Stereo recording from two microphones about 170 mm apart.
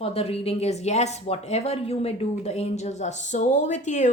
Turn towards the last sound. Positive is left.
turn(degrees=45)  # may be behind; listen again after turning